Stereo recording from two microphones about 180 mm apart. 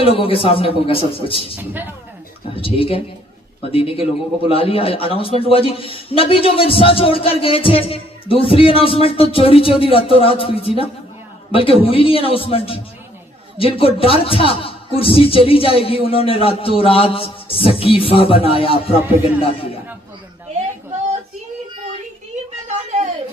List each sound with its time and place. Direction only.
0.0 s a man's voice: 30° left (ahead or behind)
1.5 s a man's voice: 10° right (ahead or behind)
2.6 s a man's voice: 30° left (ahead or behind)
22.6 s a sound: 40° right (ahead or behind)